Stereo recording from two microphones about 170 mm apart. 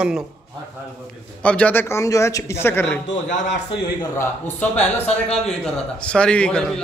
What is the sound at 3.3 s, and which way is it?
Speech, 90° left.